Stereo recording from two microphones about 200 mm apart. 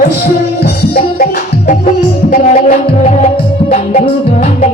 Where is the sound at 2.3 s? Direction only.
45° left (ahead or behind).